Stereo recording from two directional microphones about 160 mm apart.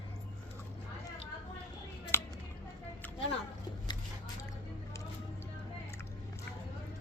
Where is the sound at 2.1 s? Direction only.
15° left (ahead or behind).